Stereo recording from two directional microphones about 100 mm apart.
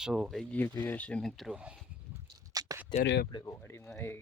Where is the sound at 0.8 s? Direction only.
20° left (ahead or behind); by 1.5 s centre (ahead or behind).